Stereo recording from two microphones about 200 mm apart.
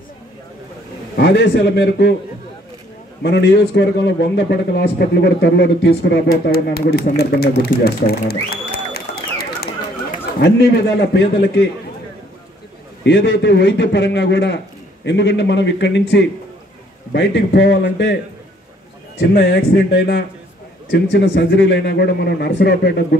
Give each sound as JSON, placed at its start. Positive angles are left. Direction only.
{"t": 1.1, "sound": "a man's voice", "side_deg": 60}
{"t": 3.2, "sound": "a man's voice", "side_deg": 55}
{"t": 11.1, "sound": "a man's voice", "side_deg": 60}
{"t": 13.0, "sound": "a man's voice", "side_deg": 60}
{"t": 19.1, "sound": "a man's voice", "side_deg": 55}